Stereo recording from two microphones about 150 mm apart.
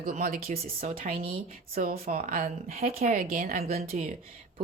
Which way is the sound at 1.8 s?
55° right (ahead or behind).